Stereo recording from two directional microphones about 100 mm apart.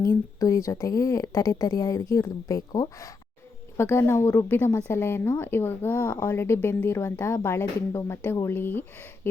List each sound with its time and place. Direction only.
0.3 s speech: 30° left (ahead or behind)